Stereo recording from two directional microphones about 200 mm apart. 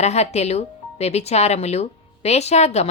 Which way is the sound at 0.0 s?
35° left (ahead or behind).